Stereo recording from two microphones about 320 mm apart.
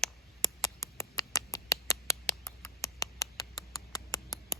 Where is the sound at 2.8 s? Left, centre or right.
Centre.